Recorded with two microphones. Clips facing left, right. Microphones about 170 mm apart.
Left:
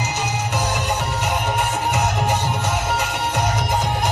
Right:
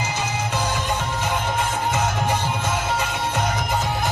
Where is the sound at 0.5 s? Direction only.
10° left (ahead or behind).